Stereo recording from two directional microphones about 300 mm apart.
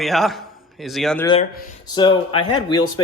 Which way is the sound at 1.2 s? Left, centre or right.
Centre.